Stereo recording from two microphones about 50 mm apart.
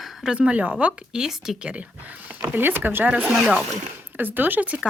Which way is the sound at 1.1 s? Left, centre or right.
Centre.